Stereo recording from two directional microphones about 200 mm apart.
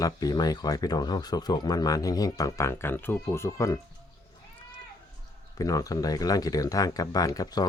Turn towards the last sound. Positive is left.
turn(degrees=20)  # may be behind; listen again after turning